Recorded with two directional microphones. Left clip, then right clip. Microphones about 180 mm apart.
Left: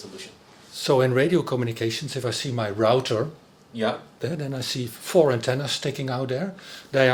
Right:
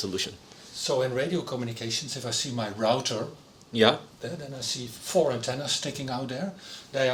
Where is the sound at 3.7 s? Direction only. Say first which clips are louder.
Right 5 dB; 45° right (ahead or behind).